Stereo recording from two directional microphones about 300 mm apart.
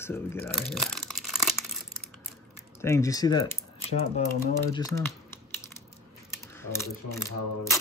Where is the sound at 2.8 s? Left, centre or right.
Centre.